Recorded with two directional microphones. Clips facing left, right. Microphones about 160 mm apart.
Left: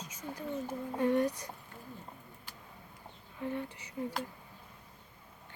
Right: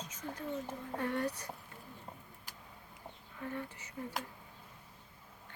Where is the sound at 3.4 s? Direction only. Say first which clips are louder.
Left 4 dB; 20° left (ahead or behind).